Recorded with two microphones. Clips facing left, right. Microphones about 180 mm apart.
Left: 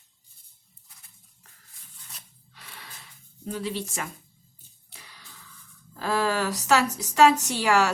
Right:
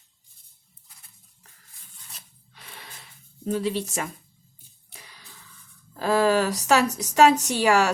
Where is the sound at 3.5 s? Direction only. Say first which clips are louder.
Right 4 dB; 30° right (ahead or behind).